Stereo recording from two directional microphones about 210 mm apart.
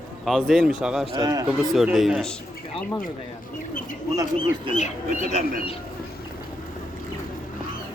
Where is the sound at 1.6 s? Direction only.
Centre (ahead or behind).